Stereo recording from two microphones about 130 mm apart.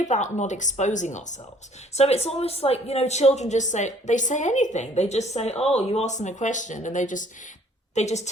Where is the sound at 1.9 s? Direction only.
55° left (ahead or behind); by 7.5 s 75° left (ahead or behind).